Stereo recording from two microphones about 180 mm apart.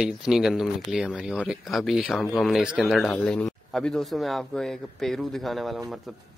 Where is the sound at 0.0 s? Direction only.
5° right (ahead or behind).